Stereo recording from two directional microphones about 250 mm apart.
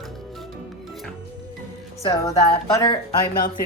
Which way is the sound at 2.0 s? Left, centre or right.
Centre.